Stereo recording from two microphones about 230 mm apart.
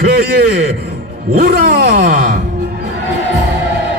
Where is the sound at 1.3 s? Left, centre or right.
Right.